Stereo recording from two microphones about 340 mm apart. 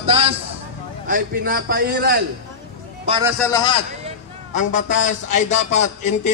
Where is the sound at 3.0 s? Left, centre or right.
Centre.